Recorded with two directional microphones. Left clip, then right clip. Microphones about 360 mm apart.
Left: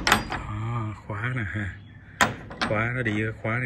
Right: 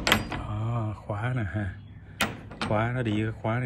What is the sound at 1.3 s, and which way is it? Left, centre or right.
Speech, right.